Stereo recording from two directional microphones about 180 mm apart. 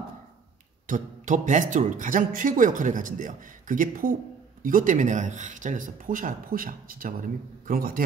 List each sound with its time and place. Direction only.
0.8 s speech: 45° right (ahead or behind)